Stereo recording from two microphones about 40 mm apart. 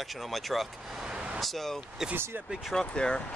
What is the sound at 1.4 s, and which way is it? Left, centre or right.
Speech, centre.